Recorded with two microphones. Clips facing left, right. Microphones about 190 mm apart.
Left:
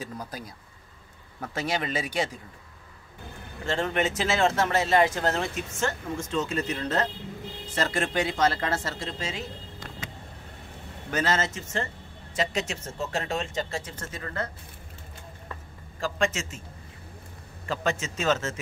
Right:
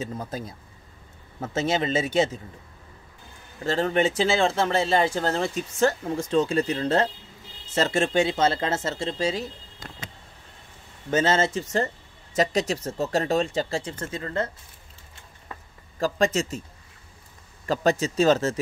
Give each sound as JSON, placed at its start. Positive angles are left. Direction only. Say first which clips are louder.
{"t": 0.0, "sound": "speech", "louder": "right 5 dB", "side_deg": -25}
{"t": 3.6, "sound": "speech", "louder": "right 4 dB", "side_deg": -35}
{"t": 11.1, "sound": "speech", "louder": "right 5 dB", "side_deg": -25}
{"t": 16.0, "sound": "speech", "louder": "right 5 dB", "side_deg": -35}
{"t": 17.6, "sound": "speech", "louder": "right 6 dB", "side_deg": -35}